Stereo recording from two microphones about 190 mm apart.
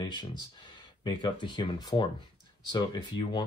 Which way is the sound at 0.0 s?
25° left (ahead or behind).